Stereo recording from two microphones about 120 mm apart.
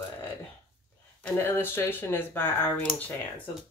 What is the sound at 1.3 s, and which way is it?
Speech, 20° left (ahead or behind).